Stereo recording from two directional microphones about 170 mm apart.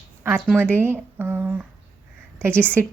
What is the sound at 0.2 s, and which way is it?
A woman's voice, 10° right (ahead or behind).